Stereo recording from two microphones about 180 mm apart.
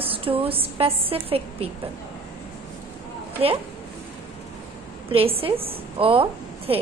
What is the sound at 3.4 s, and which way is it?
Speech, 30° right (ahead or behind).